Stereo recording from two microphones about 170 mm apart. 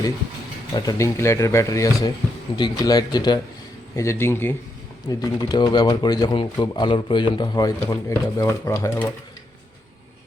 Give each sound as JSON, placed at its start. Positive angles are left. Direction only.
{"t": 0.8, "sound": "speech", "side_deg": 20}